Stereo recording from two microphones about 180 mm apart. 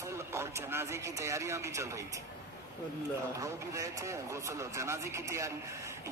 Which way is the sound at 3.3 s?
15° right (ahead or behind).